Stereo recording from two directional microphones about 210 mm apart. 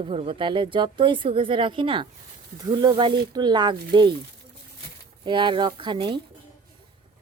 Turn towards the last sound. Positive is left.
turn(degrees=-20)  # may be behind; listen again after turning